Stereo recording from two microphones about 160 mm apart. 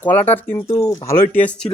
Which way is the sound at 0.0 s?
10° left (ahead or behind).